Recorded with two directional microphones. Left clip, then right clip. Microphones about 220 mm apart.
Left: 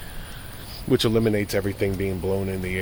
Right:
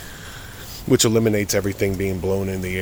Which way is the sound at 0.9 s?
25° right (ahead or behind).